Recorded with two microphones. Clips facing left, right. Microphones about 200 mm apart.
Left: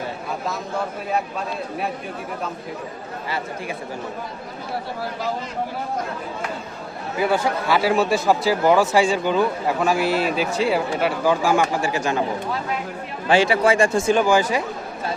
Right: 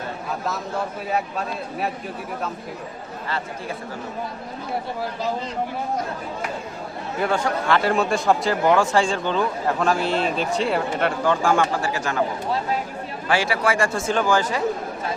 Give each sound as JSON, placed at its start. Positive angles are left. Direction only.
{"t": 7.2, "sound": "speech", "side_deg": 5}
{"t": 13.2, "sound": "speech", "side_deg": 20}